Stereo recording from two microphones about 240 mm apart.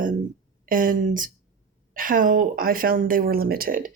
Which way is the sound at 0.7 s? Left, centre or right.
Right.